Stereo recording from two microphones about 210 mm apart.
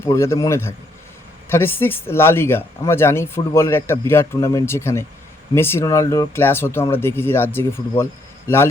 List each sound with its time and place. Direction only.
0.0 s speech: 10° left (ahead or behind)